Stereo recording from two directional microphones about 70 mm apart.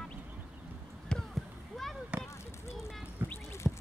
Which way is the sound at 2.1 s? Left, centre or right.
Centre.